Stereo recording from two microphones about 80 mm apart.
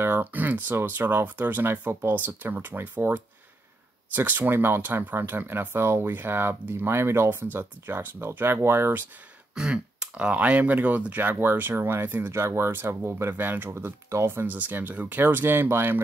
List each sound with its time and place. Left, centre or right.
0.0 s speech: right
9.6 s speech: centre; by 16.0 s right